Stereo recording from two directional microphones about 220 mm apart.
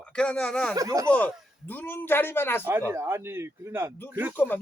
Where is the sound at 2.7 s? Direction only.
10° right (ahead or behind).